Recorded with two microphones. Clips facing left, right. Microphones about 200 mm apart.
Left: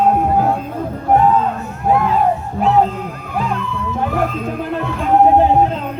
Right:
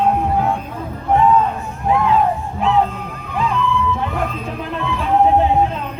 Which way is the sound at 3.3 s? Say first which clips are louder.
Right 3 dB; 40° left (ahead or behind).